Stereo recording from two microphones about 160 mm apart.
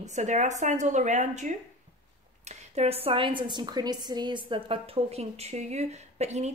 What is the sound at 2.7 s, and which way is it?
A woman's voice, 40° right (ahead or behind).